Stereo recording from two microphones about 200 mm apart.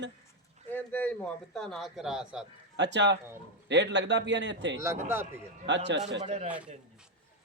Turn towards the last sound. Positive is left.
turn(degrees=-30)  # may be behind; listen again after turning